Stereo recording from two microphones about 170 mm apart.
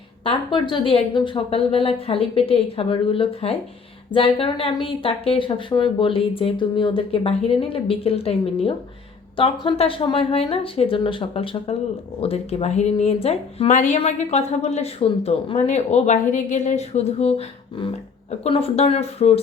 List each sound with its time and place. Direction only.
0.3 s speech: 30° left (ahead or behind)